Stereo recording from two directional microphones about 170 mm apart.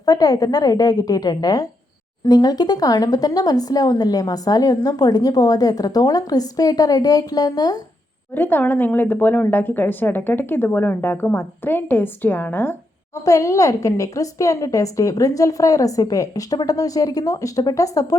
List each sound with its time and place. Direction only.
0.0 s speech: 20° left (ahead or behind)
8.4 s a woman's voice: 10° left (ahead or behind)